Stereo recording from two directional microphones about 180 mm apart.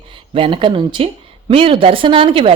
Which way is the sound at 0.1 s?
30° right (ahead or behind).